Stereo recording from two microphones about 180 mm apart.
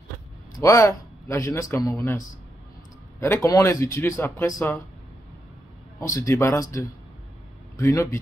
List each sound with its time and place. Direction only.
0.6 s speech: 20° left (ahead or behind)
5.9 s speech: 15° left (ahead or behind)